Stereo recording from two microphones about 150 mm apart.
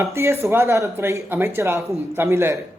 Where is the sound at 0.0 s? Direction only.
15° right (ahead or behind).